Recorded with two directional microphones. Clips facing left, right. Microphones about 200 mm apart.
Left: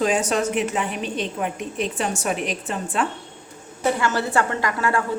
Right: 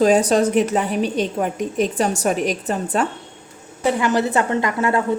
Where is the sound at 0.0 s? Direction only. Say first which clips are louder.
Right 6 dB; 35° right (ahead or behind).